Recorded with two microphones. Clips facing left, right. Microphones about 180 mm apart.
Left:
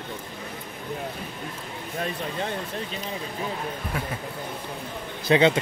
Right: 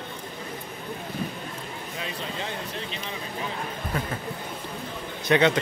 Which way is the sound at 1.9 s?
50° left (ahead or behind).